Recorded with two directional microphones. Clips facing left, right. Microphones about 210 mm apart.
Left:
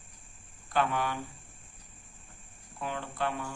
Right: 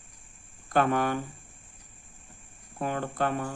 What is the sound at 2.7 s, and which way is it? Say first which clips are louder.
Speech: right 6 dB; 50° right (ahead or behind).